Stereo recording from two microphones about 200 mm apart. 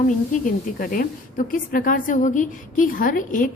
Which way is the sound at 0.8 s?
45° left (ahead or behind).